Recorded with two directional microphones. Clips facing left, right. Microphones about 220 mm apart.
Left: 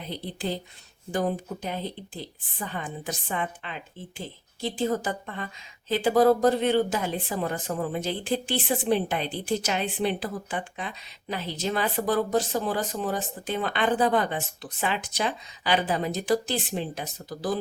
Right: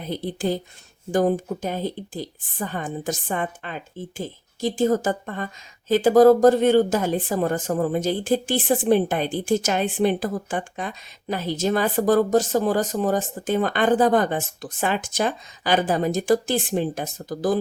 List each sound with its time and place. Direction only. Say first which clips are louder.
0.0 s speech: right 7 dB; 45° right (ahead or behind)